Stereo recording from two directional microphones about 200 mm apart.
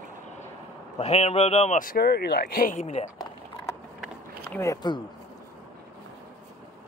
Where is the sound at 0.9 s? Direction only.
35° left (ahead or behind).